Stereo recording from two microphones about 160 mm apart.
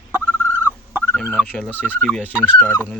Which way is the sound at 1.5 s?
10° left (ahead or behind).